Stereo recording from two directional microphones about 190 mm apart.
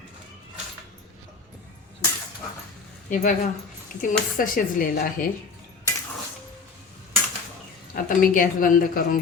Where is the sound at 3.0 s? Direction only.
40° left (ahead or behind).